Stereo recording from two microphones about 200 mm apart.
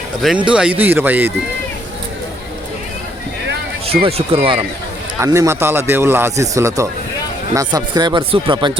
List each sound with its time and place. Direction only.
0.2 s speech: 5° right (ahead or behind)
4.0 s speech: 25° right (ahead or behind)
5.2 s speech: 15° right (ahead or behind)